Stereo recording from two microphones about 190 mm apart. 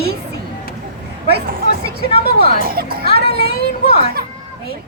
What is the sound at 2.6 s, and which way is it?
Speech, 50° right (ahead or behind).